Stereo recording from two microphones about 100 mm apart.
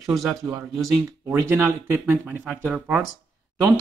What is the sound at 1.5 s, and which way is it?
Speech, 25° right (ahead or behind).